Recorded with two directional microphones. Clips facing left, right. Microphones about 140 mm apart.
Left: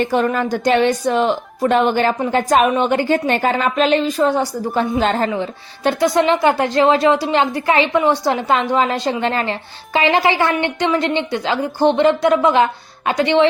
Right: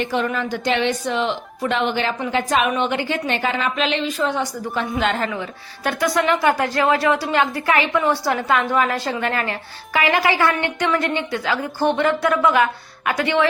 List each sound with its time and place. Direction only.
0.0 s a woman's voice: 45° left (ahead or behind); by 13.5 s 20° left (ahead or behind)